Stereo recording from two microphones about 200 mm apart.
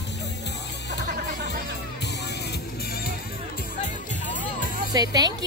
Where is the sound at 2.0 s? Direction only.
55° left (ahead or behind).